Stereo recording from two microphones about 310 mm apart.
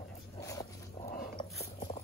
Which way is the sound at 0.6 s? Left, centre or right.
Left.